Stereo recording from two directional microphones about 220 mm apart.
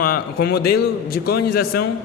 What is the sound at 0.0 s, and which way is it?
A man's voice, 45° left (ahead or behind).